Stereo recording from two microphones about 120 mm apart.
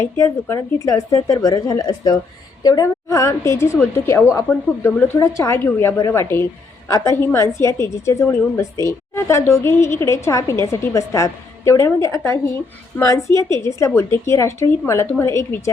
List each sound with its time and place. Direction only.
0.0 s a woman's voice: 25° left (ahead or behind)